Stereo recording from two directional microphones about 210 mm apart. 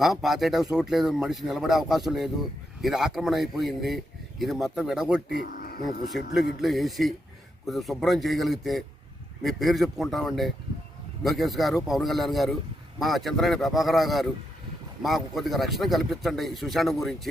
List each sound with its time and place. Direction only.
0.0 s speech: centre (ahead or behind)
5.5 s a sound: 45° left (ahead or behind)
6.1 s speech: centre (ahead or behind)